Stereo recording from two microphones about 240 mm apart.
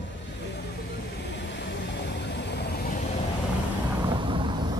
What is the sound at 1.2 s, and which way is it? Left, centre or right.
Vehicle, left.